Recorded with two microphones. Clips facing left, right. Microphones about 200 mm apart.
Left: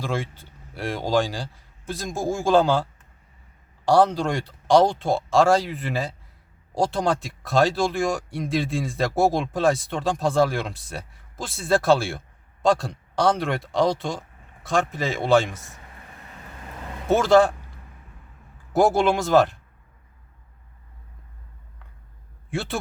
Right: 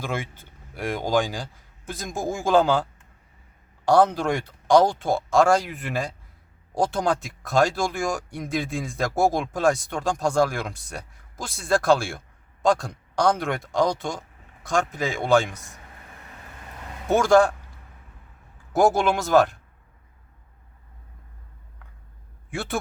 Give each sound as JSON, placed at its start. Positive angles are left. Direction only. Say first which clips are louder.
{"t": 0.0, "sound": "a man's voice", "louder": "left 2 dB", "side_deg": 0}
{"t": 2.1, "sound": "speech", "louder": "left 2 dB", "side_deg": -15}
{"t": 2.5, "sound": "speech", "louder": "even", "side_deg": 0}
{"t": 17.2, "sound": "speech", "louder": "even", "side_deg": 0}
{"t": 18.7, "sound": "speech", "louder": "left 1 dB", "side_deg": 0}
{"t": 22.4, "sound": "a man's voice", "louder": "even", "side_deg": 0}